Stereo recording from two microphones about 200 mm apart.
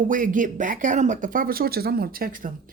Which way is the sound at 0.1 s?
40° right (ahead or behind).